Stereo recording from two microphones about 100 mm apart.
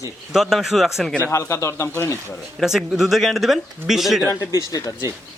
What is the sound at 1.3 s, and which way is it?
Speech, 30° left (ahead or behind).